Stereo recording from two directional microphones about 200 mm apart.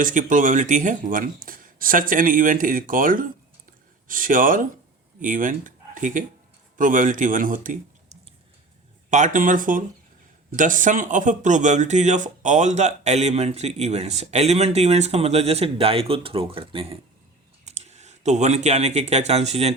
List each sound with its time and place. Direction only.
0.0 s a man's voice: 40° right (ahead or behind)